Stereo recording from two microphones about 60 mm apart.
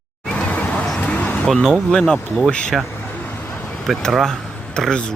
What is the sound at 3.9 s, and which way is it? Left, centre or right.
Speech, centre.